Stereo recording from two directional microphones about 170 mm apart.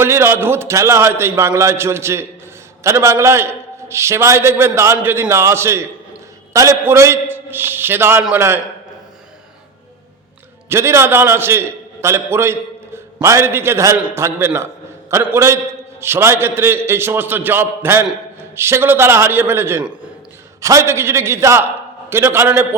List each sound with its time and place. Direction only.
0.0 s a man's voice: 15° right (ahead or behind)
10.7 s a man's voice: 15° right (ahead or behind)